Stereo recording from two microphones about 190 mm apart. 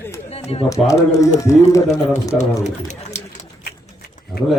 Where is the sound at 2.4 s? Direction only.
40° left (ahead or behind).